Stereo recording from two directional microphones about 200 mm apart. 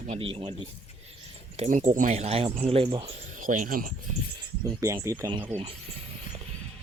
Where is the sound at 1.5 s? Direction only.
35° right (ahead or behind).